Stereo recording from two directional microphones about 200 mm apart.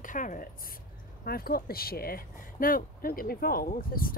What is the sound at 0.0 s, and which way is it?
A woman's voice, 40° left (ahead or behind).